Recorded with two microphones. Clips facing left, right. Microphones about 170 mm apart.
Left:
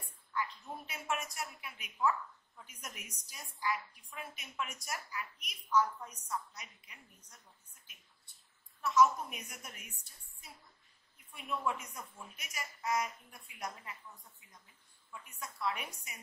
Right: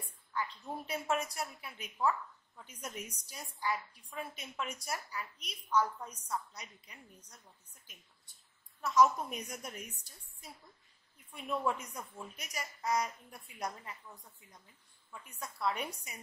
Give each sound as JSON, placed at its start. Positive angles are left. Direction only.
{"t": 0.3, "sound": "a woman's voice", "side_deg": -35}
{"t": 8.8, "sound": "a woman's voice", "side_deg": -35}
{"t": 11.3, "sound": "a woman's voice", "side_deg": -35}
{"t": 15.3, "sound": "a woman's voice", "side_deg": -35}